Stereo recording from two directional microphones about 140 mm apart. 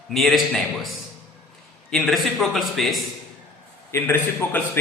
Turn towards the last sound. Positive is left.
turn(degrees=15)  # may be behind; listen again after turning